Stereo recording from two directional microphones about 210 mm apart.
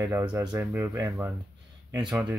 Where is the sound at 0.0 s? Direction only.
10° right (ahead or behind).